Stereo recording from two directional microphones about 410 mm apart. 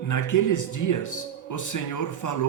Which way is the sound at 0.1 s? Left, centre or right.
Left.